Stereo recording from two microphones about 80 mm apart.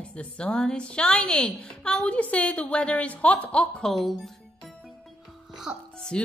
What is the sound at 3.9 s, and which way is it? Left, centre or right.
Music, centre.